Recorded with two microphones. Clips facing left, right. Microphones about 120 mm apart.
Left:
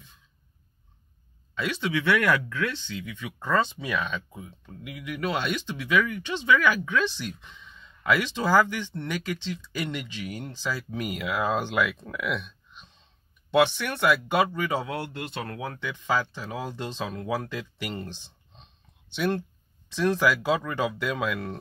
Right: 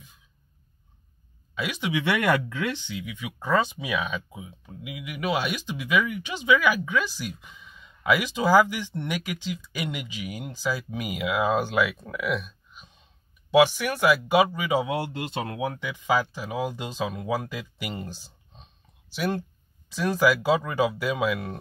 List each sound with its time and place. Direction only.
1.5 s speech: 10° right (ahead or behind)